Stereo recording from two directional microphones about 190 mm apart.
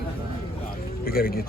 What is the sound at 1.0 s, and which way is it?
Speech, 50° left (ahead or behind).